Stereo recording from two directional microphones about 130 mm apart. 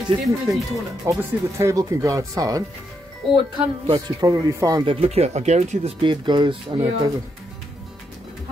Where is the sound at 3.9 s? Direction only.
25° right (ahead or behind).